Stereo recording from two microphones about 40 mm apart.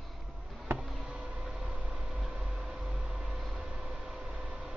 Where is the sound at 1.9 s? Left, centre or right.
Centre.